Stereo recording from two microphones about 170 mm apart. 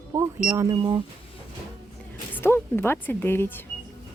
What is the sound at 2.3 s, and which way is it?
Speech, 10° left (ahead or behind).